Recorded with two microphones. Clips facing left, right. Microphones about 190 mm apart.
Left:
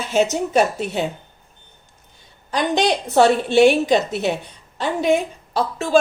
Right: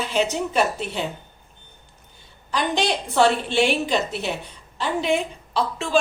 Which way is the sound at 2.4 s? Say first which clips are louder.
Left 4 dB; 50° left (ahead or behind).